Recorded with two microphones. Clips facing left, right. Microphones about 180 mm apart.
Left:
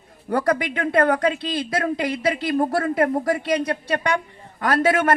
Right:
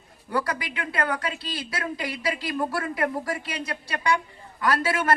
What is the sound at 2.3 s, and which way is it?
Speech, 40° left (ahead or behind).